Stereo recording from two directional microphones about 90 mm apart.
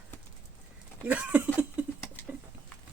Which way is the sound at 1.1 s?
15° right (ahead or behind).